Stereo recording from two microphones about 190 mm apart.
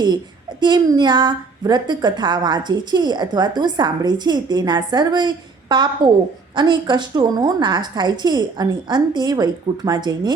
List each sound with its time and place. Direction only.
0.6 s a woman's voice: 25° right (ahead or behind)